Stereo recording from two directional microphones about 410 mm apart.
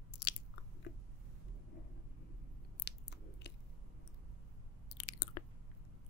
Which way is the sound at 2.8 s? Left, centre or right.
Left.